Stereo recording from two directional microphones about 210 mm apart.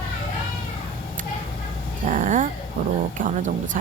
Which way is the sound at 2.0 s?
40° right (ahead or behind).